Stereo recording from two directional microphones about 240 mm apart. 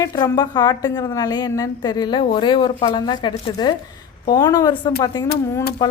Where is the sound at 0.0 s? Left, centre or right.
Centre.